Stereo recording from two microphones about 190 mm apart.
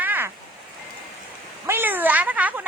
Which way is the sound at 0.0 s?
10° right (ahead or behind).